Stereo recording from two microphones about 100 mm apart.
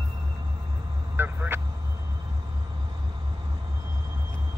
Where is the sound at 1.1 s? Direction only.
20° right (ahead or behind).